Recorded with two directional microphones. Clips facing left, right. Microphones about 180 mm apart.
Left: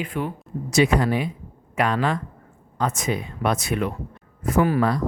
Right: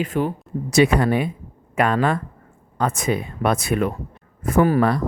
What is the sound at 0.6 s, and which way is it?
Speech, 60° right (ahead or behind).